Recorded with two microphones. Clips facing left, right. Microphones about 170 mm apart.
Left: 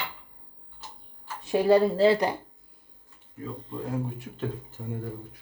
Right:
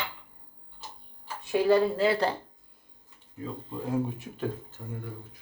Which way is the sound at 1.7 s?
35° left (ahead or behind).